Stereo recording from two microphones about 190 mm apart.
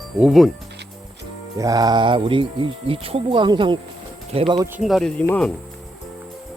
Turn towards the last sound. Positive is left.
turn(degrees=5)  # may be behind; listen again after turning